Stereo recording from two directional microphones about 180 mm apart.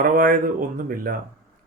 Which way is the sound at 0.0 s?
50° right (ahead or behind).